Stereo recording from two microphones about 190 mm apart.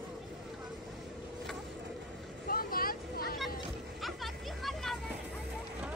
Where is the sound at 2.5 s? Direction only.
50° left (ahead or behind).